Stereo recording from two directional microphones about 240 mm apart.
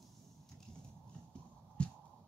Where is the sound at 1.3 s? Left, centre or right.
Centre.